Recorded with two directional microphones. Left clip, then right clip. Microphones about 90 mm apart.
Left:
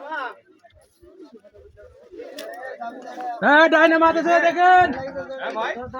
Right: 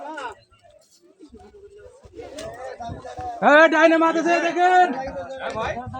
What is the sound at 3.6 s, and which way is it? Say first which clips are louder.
Speech: even; 10° left (ahead or behind).